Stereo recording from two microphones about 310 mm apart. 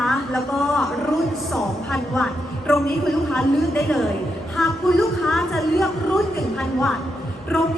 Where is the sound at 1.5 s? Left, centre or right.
Centre.